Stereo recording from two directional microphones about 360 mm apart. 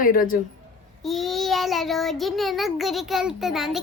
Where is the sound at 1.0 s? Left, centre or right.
Centre.